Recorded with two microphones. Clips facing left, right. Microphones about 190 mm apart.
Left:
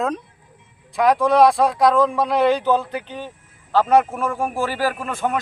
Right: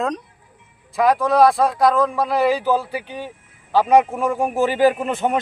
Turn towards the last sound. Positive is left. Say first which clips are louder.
# right 3 dB
turn(degrees=-25)  # may be behind; listen again after turning